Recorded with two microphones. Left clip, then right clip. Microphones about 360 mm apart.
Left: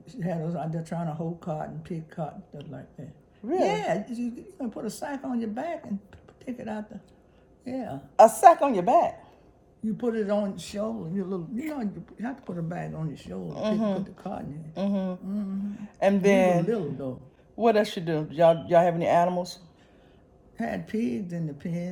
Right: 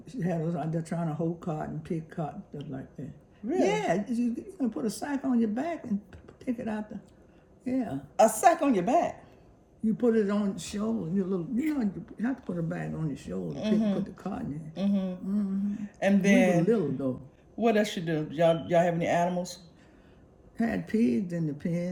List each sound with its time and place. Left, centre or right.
0.0 s speech: centre
8.1 s speech: centre
13.5 s speech: centre
14.8 s speech: centre
20.6 s speech: centre